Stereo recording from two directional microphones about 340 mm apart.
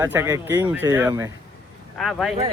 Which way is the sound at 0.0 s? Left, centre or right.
Centre.